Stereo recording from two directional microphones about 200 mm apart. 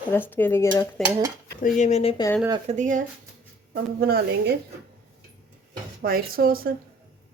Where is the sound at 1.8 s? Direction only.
30° left (ahead or behind).